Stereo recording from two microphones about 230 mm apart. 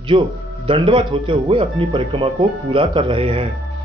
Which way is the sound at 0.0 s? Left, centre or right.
Right.